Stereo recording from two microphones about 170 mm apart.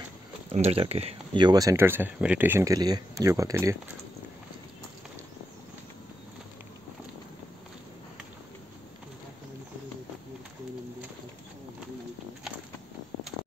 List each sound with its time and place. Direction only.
0.5 s speech: 35° right (ahead or behind); by 3.7 s 20° right (ahead or behind)